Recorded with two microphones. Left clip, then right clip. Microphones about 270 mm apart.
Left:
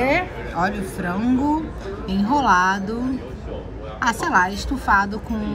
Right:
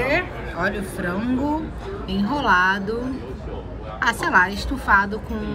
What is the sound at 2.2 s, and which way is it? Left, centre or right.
Speech, centre.